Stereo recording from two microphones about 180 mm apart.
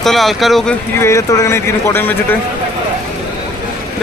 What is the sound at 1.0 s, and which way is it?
Speech, 15° left (ahead or behind).